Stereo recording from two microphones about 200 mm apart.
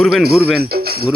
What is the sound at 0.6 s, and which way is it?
Speech, 50° right (ahead or behind).